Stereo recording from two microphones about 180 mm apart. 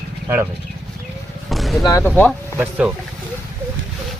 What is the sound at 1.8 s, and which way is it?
Speech, 15° left (ahead or behind).